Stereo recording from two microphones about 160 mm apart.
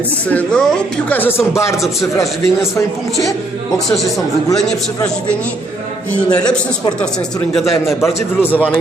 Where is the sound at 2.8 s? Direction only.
15° left (ahead or behind).